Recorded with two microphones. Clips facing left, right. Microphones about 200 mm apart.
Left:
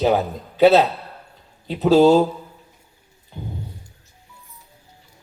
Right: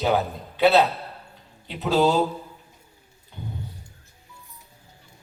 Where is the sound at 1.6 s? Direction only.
40° left (ahead or behind).